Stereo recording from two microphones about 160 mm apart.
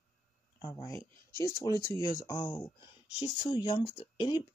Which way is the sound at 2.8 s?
35° left (ahead or behind).